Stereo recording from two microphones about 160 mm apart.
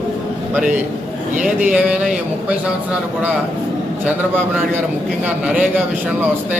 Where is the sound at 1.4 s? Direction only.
5° right (ahead or behind).